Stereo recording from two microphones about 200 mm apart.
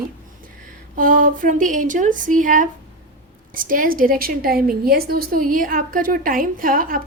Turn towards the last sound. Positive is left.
turn(degrees=-45)  # may be behind; listen again after turning